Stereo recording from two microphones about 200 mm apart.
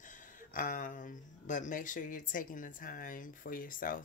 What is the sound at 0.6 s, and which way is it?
Speech, 40° left (ahead or behind).